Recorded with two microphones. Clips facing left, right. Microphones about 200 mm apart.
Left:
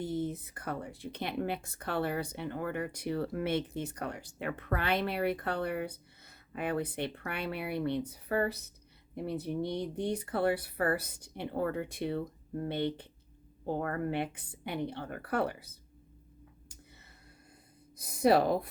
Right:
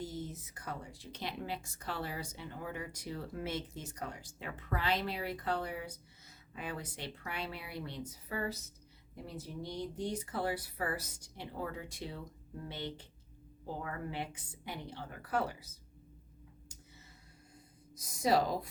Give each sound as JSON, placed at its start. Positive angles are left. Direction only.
{"t": 0.0, "sound": "speech", "side_deg": 55}
{"t": 17.9, "sound": "speech", "side_deg": 60}